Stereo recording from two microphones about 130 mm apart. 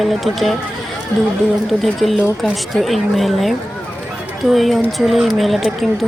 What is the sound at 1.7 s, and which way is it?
Speech, centre (ahead or behind).